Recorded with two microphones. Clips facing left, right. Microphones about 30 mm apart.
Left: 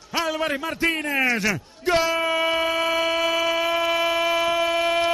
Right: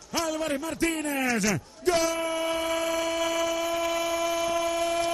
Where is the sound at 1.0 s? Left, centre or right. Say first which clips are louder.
Left 5 dB; left.